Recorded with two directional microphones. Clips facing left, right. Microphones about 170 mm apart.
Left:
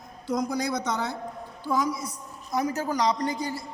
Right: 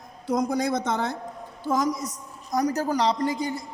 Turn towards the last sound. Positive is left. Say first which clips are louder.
# right 2 dB
turn(degrees=-20)  # may be behind; listen again after turning